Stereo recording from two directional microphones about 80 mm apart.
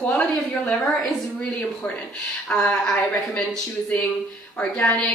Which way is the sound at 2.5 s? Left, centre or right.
Centre.